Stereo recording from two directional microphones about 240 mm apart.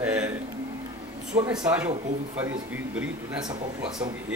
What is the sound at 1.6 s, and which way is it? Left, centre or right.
A man's voice, centre.